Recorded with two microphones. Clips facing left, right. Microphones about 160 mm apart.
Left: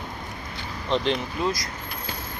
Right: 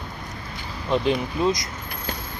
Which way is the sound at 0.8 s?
10° right (ahead or behind).